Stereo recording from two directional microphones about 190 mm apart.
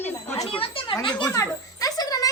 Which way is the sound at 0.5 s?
30° left (ahead or behind).